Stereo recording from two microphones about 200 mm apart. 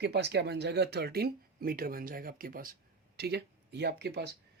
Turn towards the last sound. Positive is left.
turn(degrees=-55)  # may be behind; listen again after turning